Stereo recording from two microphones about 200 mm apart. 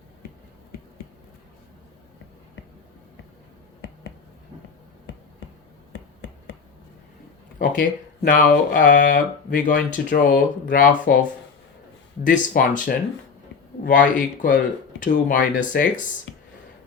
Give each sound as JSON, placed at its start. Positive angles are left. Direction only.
{"t": 3.8, "sound": "finger snapping", "side_deg": 55}
{"t": 5.9, "sound": "a sound", "side_deg": 55}
{"t": 7.6, "sound": "speech", "side_deg": 45}